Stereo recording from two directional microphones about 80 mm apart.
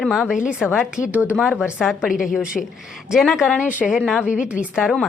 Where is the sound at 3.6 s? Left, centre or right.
Centre.